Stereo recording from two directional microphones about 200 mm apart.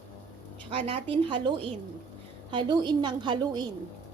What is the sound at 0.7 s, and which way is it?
A woman's voice, 30° right (ahead or behind).